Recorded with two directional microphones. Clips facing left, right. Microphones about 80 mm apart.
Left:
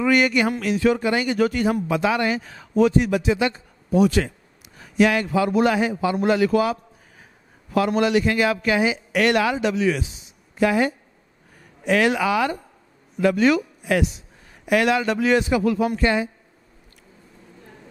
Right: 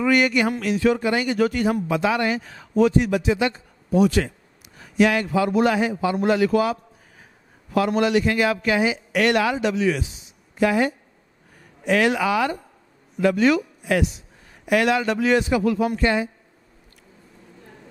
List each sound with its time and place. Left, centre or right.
0.0 s speech: centre